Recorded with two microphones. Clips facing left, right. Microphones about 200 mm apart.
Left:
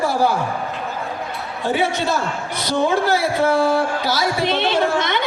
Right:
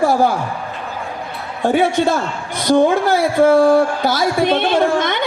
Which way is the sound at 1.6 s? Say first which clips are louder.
Right 6 dB; 50° right (ahead or behind).